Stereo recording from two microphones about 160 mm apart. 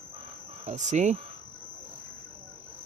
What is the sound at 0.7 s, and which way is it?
Speech, 50° right (ahead or behind).